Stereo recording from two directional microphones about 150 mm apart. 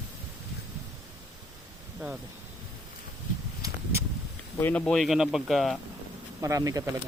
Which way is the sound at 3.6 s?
15° right (ahead or behind).